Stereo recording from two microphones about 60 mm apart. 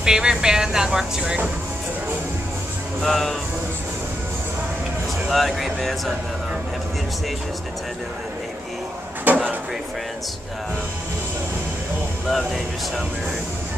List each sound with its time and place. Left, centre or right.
0.0 s speech: centre
3.0 s speech: centre
5.3 s speech: centre
9.3 s a sound: right